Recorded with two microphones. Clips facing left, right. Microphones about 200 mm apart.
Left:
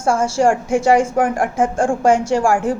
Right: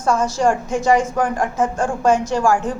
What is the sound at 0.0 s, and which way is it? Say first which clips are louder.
A woman's voice: left 2 dB; 30° left (ahead or behind).